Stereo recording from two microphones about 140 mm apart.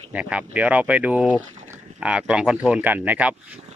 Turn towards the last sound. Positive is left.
turn(degrees=-10)  # may be behind; listen again after turning